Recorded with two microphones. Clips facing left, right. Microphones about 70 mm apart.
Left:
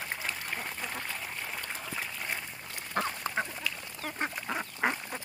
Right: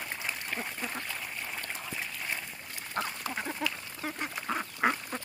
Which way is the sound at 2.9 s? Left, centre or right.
Left.